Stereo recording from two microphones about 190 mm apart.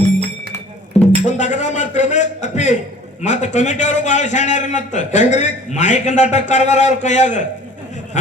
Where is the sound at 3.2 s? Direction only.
40° left (ahead or behind).